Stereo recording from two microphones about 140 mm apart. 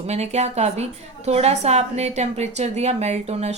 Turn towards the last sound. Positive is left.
turn(degrees=-50)  # may be behind; listen again after turning